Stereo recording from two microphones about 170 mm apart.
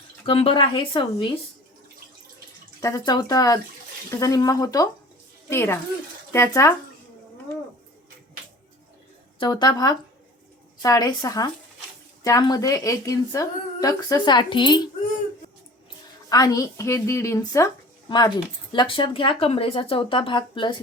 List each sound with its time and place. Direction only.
0.3 s speech: 30° left (ahead or behind)
2.8 s speech: 20° left (ahead or behind)
9.4 s speech: 25° left (ahead or behind)
16.3 s speech: 20° left (ahead or behind)
18.7 s speech: 30° left (ahead or behind)